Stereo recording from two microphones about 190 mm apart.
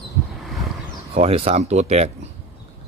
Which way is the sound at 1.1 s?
30° right (ahead or behind).